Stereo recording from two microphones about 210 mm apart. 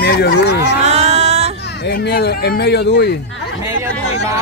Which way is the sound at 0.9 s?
30° right (ahead or behind).